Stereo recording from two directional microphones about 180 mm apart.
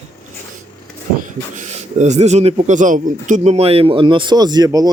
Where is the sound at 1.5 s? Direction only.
40° right (ahead or behind).